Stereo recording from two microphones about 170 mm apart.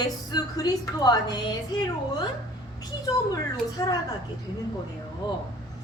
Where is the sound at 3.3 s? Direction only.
20° left (ahead or behind).